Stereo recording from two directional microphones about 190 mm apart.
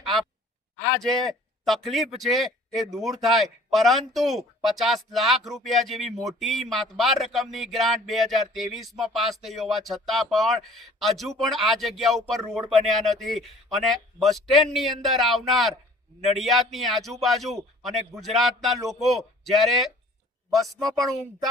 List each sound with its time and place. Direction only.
0.0 s a sound: centre (ahead or behind)
0.9 s speech: centre (ahead or behind)
20.8 s speech: 20° right (ahead or behind)